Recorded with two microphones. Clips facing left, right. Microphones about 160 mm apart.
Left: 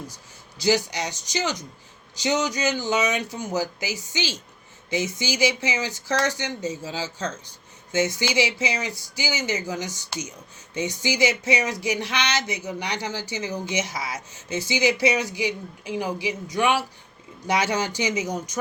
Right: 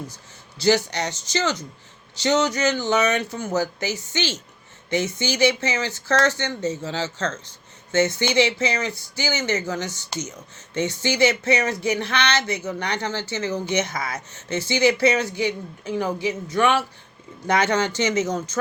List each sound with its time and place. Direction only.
0.6 s speech: 15° left (ahead or behind)
4.9 s speech: 65° right (ahead or behind)
5.2 s speech: 10° left (ahead or behind)